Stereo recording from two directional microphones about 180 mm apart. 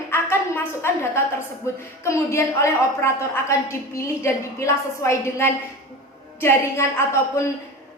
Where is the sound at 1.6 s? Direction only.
15° left (ahead or behind).